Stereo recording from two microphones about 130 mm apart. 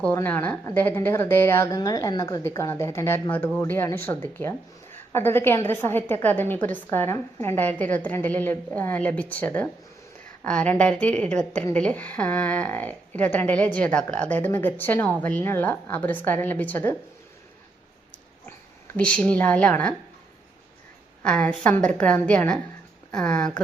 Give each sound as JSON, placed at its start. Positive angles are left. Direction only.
{"t": 0.0, "sound": "speech", "side_deg": 15}
{"t": 18.9, "sound": "speech", "side_deg": 10}
{"t": 21.2, "sound": "speech", "side_deg": 5}